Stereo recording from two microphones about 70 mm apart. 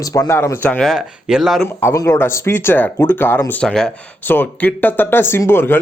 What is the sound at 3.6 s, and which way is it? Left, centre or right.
Speech, centre.